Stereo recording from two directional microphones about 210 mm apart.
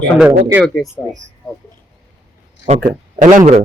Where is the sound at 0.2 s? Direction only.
10° right (ahead or behind).